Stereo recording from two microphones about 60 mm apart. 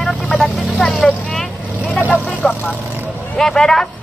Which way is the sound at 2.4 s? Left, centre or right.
Left.